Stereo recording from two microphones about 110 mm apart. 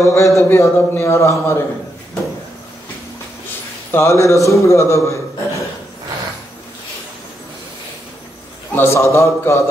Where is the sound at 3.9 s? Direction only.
25° left (ahead or behind).